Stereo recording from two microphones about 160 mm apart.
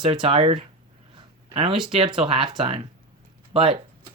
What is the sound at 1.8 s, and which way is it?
Speech, 35° right (ahead or behind).